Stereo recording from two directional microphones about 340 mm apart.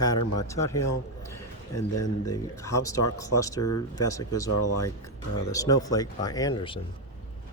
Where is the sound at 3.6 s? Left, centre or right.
Left.